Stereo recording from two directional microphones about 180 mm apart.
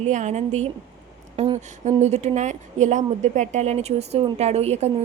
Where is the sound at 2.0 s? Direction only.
40° right (ahead or behind).